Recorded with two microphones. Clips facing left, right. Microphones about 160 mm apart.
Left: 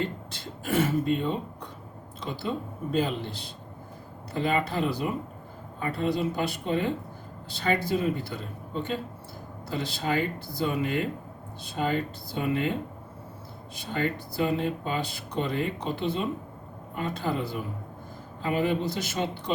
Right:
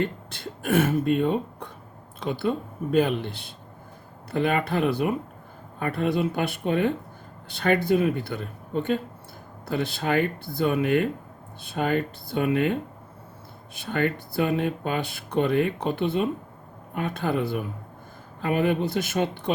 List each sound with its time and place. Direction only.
0.0 s speech: 55° right (ahead or behind)
13.7 s speech: 60° right (ahead or behind)